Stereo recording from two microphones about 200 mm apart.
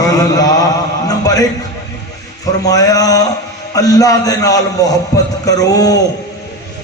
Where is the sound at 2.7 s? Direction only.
20° left (ahead or behind).